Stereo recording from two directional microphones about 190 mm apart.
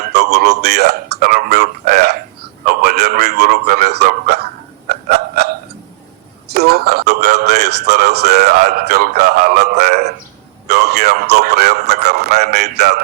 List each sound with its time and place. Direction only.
0.0 s a man's voice: 60° right (ahead or behind)
4.9 s hiccup: 55° right (ahead or behind)
6.5 s speech: 55° right (ahead or behind)